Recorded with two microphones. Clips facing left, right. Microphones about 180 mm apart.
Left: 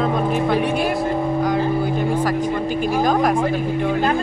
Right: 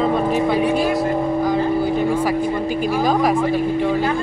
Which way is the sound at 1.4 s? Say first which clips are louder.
Right 1 dB; centre (ahead or behind).